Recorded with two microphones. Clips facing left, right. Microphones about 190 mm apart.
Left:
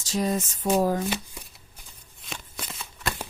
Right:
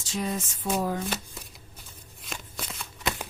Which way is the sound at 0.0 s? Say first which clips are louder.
Left 5 dB; 40° left (ahead or behind).